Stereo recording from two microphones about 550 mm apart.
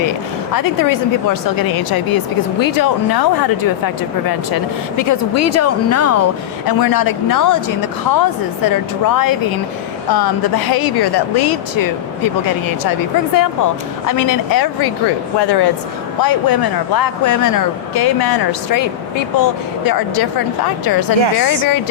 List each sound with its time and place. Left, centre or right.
0.5 s a woman's voice: left
6.7 s a woman's voice: left